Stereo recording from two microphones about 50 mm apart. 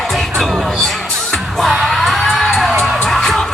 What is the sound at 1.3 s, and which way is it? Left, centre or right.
Music, centre.